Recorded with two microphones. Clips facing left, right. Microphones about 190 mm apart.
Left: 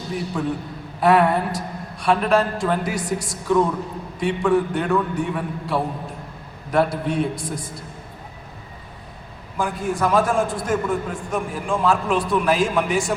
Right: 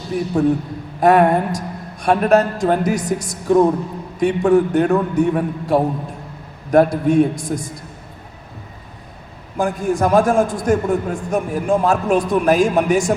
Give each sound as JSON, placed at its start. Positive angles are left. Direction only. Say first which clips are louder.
{"t": 0.4, "sound": "a man's voice", "louder": "right 8 dB", "side_deg": -45}
{"t": 9.6, "sound": "a man's voice", "louder": "right 5 dB", "side_deg": -45}